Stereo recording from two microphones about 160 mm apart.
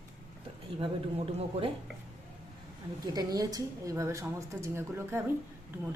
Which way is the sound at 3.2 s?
20° right (ahead or behind).